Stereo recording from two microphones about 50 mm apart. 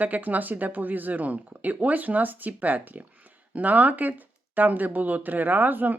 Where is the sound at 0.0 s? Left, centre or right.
Right.